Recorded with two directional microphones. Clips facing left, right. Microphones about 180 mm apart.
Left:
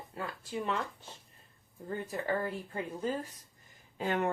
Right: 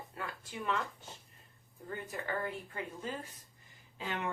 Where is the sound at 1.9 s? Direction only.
35° left (ahead or behind).